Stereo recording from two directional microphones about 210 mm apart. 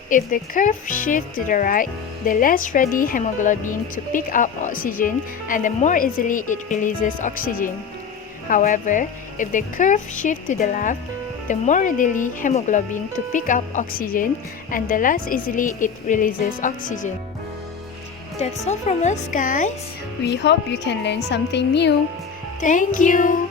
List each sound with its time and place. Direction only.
0.1 s speech: 40° left (ahead or behind)
18.3 s speech: 30° left (ahead or behind)
20.2 s a woman's voice: 55° left (ahead or behind)
22.6 s speech: 40° left (ahead or behind)